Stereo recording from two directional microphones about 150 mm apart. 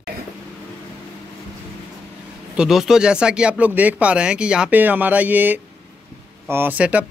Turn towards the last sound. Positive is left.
turn(degrees=-10)  # may be behind; listen again after turning